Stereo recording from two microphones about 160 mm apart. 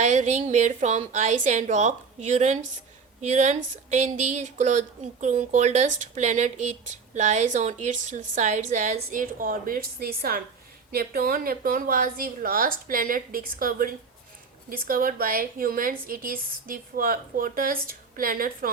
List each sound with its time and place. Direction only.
0.0 s a woman's voice: 45° right (ahead or behind); by 18.7 s 60° right (ahead or behind)